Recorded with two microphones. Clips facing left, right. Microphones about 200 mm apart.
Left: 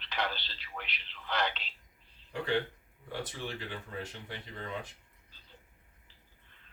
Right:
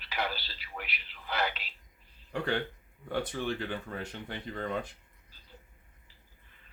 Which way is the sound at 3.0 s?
55° right (ahead or behind).